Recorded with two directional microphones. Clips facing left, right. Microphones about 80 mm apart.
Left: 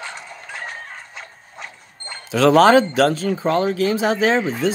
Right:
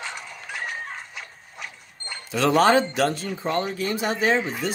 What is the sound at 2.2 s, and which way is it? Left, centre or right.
Speech, left.